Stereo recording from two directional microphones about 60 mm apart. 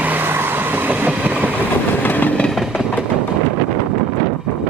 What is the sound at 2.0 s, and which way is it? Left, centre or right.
Train, left.